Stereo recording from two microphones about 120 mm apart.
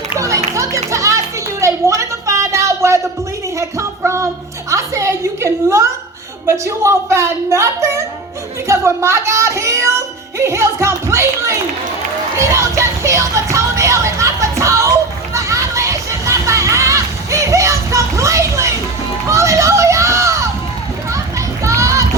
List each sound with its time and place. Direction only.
0.1 s music: 25° right (ahead or behind)
1.6 s a sound: 25° right (ahead or behind)
6.4 s a woman's voice: 20° right (ahead or behind)
12.4 s music: 25° right (ahead or behind)
19.3 s a sound: 25° right (ahead or behind)
21.1 s children playing: 25° right (ahead or behind)